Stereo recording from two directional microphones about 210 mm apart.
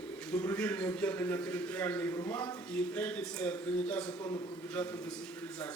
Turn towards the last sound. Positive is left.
turn(degrees=5)  # may be behind; listen again after turning